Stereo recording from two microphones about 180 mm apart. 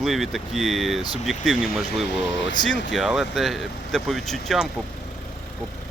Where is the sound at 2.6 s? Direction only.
Centre (ahead or behind).